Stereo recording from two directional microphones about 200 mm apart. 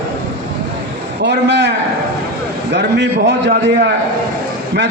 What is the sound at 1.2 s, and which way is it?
Speech, 60° right (ahead or behind).